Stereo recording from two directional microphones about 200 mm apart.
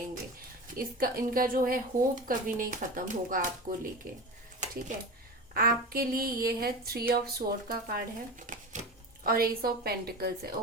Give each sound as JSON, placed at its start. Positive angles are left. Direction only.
{"t": 0.8, "sound": "speech", "side_deg": -45}